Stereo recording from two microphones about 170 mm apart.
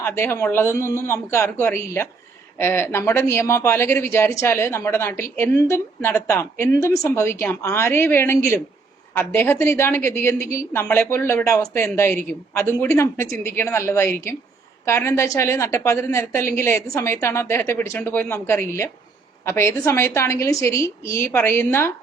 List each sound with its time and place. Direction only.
0.0 s a man's voice: 15° left (ahead or behind)